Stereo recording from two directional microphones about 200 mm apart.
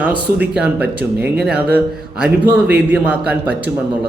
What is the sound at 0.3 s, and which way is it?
Speech, 5° right (ahead or behind).